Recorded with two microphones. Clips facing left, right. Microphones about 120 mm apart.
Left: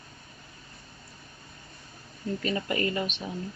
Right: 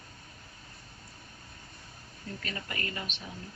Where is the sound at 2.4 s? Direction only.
25° left (ahead or behind).